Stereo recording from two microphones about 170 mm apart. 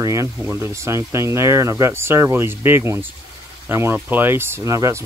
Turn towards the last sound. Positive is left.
turn(degrees=-20)  # may be behind; listen again after turning